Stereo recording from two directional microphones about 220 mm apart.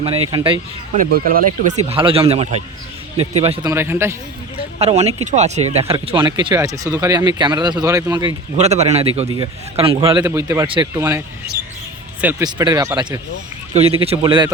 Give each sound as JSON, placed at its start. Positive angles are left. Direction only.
{"t": 0.0, "sound": "speech", "side_deg": -25}
{"t": 0.9, "sound": "speech", "side_deg": -40}
{"t": 1.8, "sound": "speech", "side_deg": -25}
{"t": 3.7, "sound": "speech", "side_deg": -10}
{"t": 4.8, "sound": "speech", "side_deg": -30}
{"t": 8.5, "sound": "speech", "side_deg": -30}
{"t": 12.2, "sound": "speech", "side_deg": -15}
{"t": 13.7, "sound": "speech", "side_deg": -25}